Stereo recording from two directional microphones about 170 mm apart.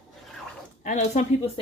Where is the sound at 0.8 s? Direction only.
45° left (ahead or behind).